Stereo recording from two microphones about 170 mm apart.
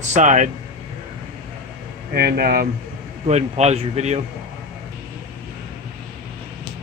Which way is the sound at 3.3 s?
40° right (ahead or behind).